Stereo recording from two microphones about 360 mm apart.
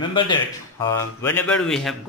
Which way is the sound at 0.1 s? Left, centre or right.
Centre.